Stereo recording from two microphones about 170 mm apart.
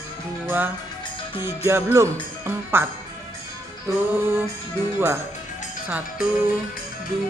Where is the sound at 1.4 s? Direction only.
15° right (ahead or behind).